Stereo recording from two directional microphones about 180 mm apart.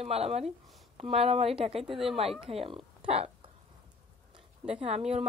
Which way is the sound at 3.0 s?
35° right (ahead or behind).